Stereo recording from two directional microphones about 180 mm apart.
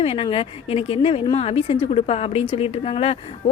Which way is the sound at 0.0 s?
30° left (ahead or behind).